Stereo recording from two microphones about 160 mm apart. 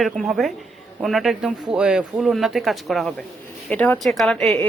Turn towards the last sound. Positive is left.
turn(degrees=5)  # may be behind; listen again after turning